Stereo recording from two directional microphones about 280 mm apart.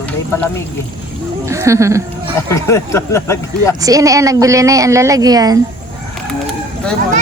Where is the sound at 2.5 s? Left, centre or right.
Centre.